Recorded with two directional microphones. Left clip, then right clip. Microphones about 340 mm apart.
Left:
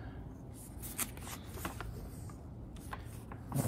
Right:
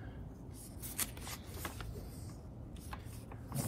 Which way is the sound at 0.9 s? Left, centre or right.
Centre.